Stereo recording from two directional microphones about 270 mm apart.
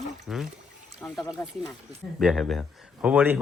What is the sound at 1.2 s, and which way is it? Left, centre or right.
Speech, centre.